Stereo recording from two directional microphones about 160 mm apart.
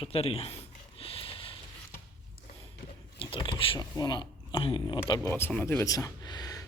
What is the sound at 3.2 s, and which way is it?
Speech, 30° left (ahead or behind).